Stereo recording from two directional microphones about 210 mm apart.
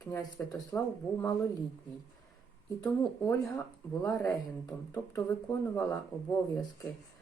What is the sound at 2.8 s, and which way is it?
Speech, 15° left (ahead or behind).